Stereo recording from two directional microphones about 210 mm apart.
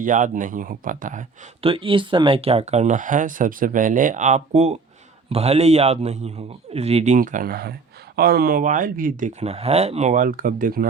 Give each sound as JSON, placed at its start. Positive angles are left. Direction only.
{"t": 0.0, "sound": "a man's voice", "side_deg": -40}
{"t": 1.6, "sound": "a man's voice", "side_deg": -25}